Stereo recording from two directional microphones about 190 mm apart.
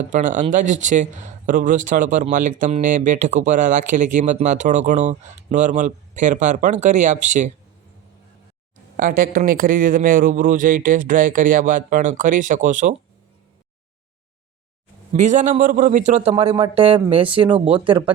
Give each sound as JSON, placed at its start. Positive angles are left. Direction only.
{"t": 0.1, "sound": "speech", "side_deg": -40}
{"t": 9.0, "sound": "a man's voice", "side_deg": -45}
{"t": 15.1, "sound": "speech", "side_deg": -40}